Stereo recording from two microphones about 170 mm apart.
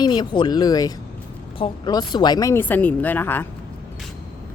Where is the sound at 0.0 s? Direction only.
25° left (ahead or behind).